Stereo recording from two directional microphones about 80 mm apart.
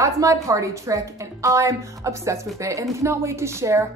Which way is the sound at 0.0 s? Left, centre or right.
Right.